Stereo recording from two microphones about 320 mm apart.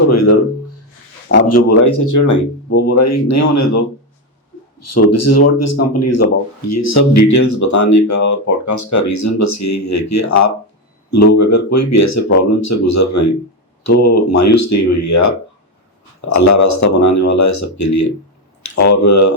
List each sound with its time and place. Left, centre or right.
0.1 s speech: left
1.4 s speech: left
2.6 s speech: left
4.8 s speech: left
16.3 s speech: left